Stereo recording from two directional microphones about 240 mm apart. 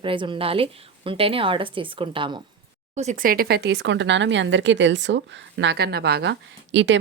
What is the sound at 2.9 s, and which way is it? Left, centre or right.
Speech, right.